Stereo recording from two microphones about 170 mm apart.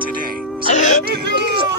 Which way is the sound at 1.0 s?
75° right (ahead or behind).